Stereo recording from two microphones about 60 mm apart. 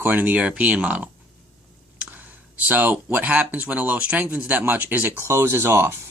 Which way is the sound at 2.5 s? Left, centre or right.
Right.